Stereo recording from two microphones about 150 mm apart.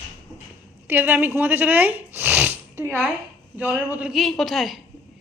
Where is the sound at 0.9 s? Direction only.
10° right (ahead or behind).